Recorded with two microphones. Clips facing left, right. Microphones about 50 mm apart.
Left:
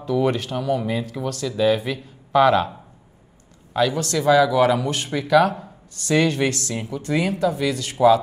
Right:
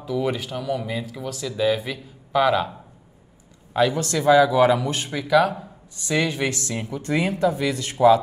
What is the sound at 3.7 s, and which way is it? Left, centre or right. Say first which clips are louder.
A man's voice: even; right.